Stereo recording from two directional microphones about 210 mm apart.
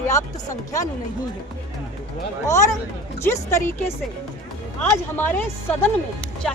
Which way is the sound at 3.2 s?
10° left (ahead or behind).